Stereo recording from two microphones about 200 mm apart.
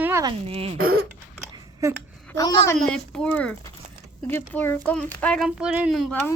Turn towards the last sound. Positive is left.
turn(degrees=0)  # may be behind; listen again after turning